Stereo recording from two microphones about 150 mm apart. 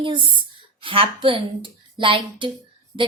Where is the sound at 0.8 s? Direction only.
35° right (ahead or behind).